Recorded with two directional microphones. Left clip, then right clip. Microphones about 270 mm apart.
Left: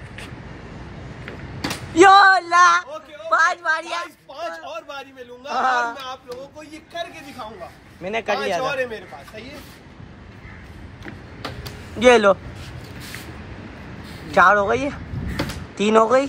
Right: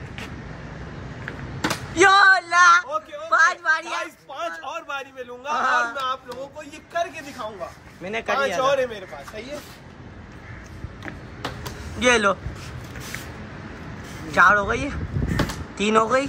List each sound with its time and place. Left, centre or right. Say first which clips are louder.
1.6 s a sound: left 4 dB; centre
3.3 s a man's voice: even; centre
8.0 s speech: even; centre
11.6 s vehicle: left 6 dB; centre
14.3 s speech: left 2 dB; centre